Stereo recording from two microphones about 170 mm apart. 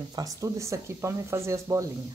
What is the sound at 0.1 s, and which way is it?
Speech, 20° right (ahead or behind).